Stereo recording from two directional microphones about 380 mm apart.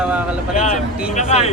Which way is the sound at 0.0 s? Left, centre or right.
Centre.